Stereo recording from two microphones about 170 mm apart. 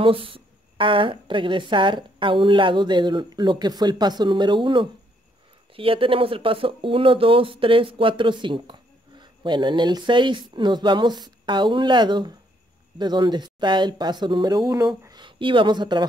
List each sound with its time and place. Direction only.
0.0 s a woman's voice: 30° right (ahead or behind)